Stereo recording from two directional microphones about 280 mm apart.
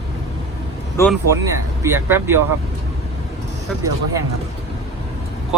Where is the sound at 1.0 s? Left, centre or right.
Centre.